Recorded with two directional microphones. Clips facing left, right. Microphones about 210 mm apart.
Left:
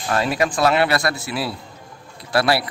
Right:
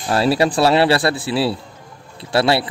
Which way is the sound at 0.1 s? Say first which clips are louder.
Right 4 dB; 35° right (ahead or behind).